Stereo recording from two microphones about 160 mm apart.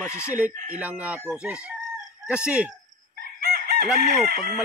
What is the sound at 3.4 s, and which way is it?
Chicken, 70° right (ahead or behind).